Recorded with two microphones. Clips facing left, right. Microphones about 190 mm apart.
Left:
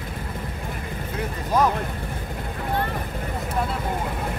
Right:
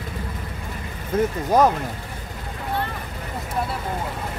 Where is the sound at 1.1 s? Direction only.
45° right (ahead or behind).